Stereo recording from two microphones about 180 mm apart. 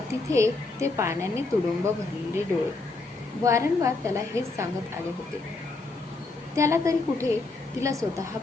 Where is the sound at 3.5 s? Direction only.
15° right (ahead or behind).